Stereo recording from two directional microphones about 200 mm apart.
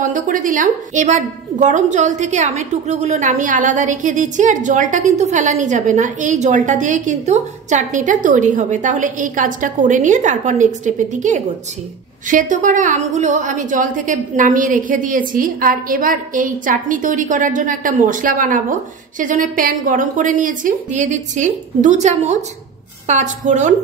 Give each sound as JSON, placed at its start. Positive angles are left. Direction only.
{"t": 0.0, "sound": "a woman's voice", "side_deg": -40}